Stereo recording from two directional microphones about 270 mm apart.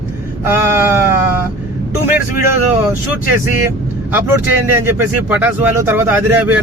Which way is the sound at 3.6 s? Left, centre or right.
Centre.